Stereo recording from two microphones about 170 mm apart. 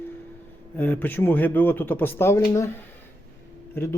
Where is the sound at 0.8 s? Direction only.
10° left (ahead or behind).